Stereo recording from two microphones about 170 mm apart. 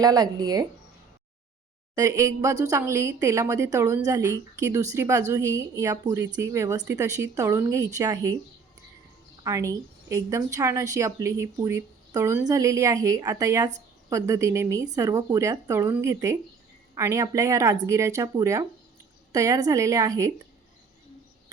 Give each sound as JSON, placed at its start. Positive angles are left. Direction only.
{"t": 0.0, "sound": "a woman's voice", "side_deg": -20}
{"t": 2.0, "sound": "a woman's voice", "side_deg": -20}
{"t": 9.4, "sound": "a woman's voice", "side_deg": -20}